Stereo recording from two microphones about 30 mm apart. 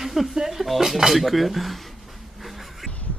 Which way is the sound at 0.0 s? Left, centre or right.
Centre.